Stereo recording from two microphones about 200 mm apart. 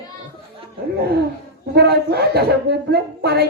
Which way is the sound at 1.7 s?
55° right (ahead or behind).